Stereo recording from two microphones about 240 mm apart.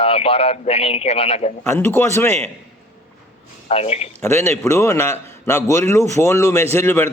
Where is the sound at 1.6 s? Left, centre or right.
Centre.